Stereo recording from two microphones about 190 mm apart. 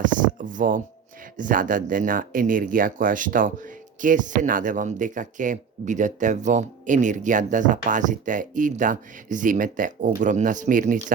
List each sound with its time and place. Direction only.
0.2 s speech: 45° right (ahead or behind)